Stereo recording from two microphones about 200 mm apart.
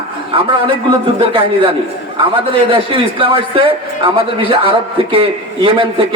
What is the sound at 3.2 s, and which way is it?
A man's voice, 25° right (ahead or behind).